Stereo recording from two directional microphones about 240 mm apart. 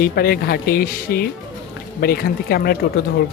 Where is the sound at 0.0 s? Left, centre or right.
Left.